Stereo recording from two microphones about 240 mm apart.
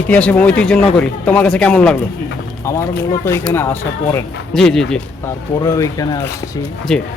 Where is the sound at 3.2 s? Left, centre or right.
Centre.